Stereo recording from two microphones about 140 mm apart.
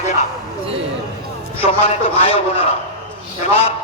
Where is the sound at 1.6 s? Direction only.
45° left (ahead or behind).